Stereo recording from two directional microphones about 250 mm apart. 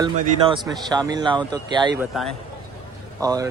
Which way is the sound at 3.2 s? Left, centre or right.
Centre.